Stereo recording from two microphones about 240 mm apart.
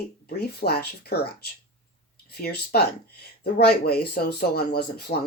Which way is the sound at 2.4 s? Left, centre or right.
Left.